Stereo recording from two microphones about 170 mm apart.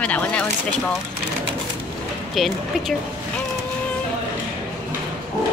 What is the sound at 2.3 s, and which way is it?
Speech, centre (ahead or behind).